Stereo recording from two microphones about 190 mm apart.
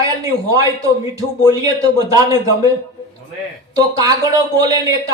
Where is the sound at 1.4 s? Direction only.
20° right (ahead or behind).